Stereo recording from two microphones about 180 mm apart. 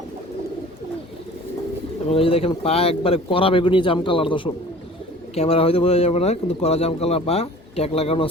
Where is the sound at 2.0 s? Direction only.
30° left (ahead or behind).